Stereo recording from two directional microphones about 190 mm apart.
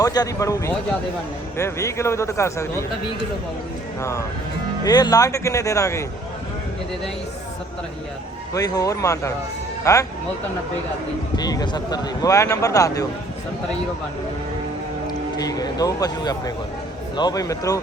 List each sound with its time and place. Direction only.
0.0 s speech: 20° left (ahead or behind)
4.0 s speech: 15° left (ahead or behind)
8.5 s speech: 20° left (ahead or behind)
11.3 s speech: 20° left (ahead or behind)
15.0 s speech: 20° left (ahead or behind)